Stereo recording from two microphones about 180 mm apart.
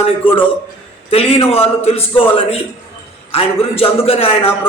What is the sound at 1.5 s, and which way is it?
A man's voice, 35° left (ahead or behind).